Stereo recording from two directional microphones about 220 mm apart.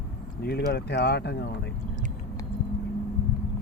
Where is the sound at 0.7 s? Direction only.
45° left (ahead or behind).